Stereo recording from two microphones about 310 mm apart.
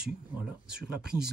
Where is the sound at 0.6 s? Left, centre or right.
Right.